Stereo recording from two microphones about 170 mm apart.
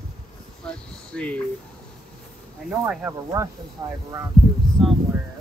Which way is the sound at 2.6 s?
5° right (ahead or behind).